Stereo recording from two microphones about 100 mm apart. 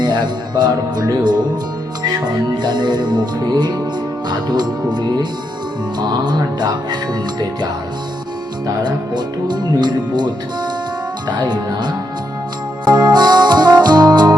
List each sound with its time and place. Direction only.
0.0 s speech: 45° right (ahead or behind)
8.8 s speech: 45° right (ahead or behind)
12.8 s music: 45° right (ahead or behind)